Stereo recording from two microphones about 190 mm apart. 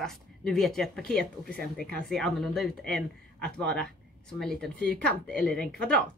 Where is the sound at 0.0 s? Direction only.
5° left (ahead or behind).